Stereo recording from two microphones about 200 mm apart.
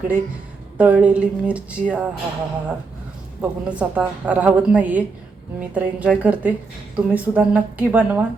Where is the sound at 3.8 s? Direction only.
5° right (ahead or behind).